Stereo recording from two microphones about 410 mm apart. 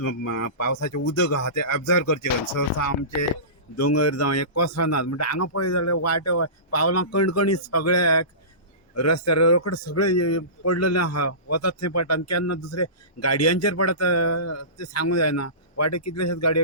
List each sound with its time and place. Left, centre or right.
0.0 s a man's voice: left